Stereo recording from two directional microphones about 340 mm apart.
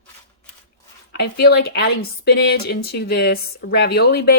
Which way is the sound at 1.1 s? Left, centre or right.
Left.